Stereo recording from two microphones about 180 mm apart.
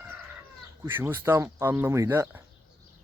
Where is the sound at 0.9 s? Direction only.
10° right (ahead or behind).